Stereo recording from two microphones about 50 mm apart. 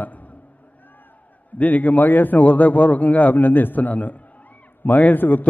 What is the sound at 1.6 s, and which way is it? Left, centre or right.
A man's voice, left.